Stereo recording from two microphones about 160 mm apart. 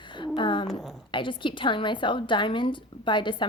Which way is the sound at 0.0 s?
30° left (ahead or behind).